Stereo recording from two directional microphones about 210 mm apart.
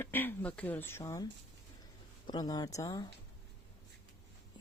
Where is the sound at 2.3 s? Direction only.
20° left (ahead or behind).